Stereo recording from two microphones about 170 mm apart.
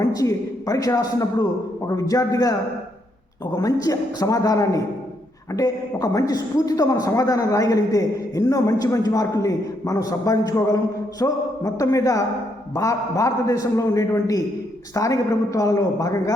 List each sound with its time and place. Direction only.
0.0 s a man's voice: 20° left (ahead or behind)